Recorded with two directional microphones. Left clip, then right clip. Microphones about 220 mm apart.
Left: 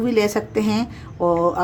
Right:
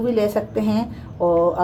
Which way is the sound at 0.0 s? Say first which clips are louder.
Even; 35° left (ahead or behind).